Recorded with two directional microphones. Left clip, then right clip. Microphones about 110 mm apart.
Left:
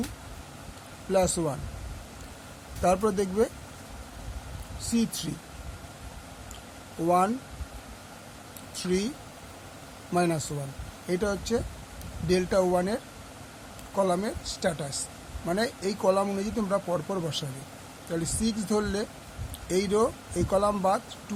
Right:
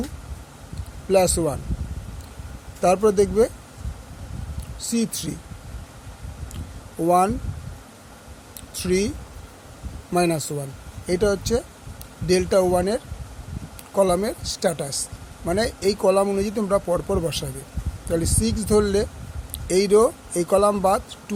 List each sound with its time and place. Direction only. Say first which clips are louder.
1.1 s speech: right 7 dB; 50° right (ahead or behind)
2.8 s speech: right 7 dB; 50° right (ahead or behind)
4.8 s speech: right 4 dB; 50° right (ahead or behind)
7.0 s speech: right 6 dB; 50° right (ahead or behind)
8.7 s speech: right 7 dB; 50° right (ahead or behind)
10.2 s speech: right 5 dB; 55° right (ahead or behind); by 15.0 s 75° right (ahead or behind)
15.4 s speech: right 7 dB; 65° right (ahead or behind)
16.4 s speech: right 7 dB; 60° right (ahead or behind)